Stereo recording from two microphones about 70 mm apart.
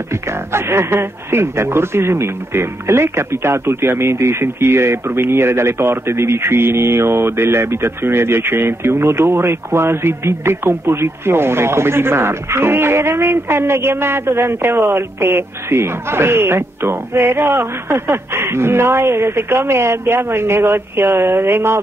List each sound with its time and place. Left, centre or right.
0.1 s speech: right